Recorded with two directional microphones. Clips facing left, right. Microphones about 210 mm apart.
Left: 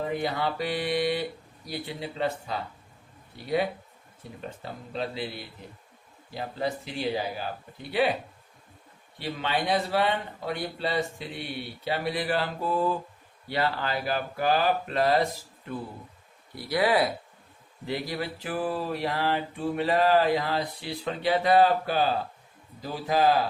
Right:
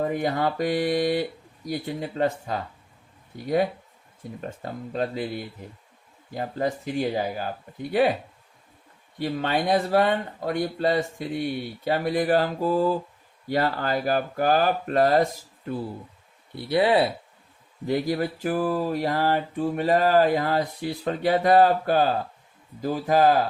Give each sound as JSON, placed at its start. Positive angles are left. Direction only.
{"t": 0.0, "sound": "speech", "side_deg": -45}
{"t": 9.1, "sound": "speech", "side_deg": -45}
{"t": 16.6, "sound": "speech", "side_deg": -25}
{"t": 17.8, "sound": "speech", "side_deg": -45}